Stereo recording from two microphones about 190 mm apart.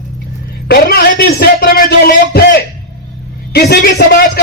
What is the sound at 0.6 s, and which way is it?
A man's voice, 55° left (ahead or behind).